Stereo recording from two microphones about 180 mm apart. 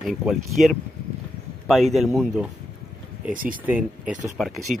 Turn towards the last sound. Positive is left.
turn(degrees=0)  # may be behind; listen again after turning